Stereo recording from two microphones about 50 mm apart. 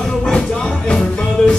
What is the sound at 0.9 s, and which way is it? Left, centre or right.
Music, centre.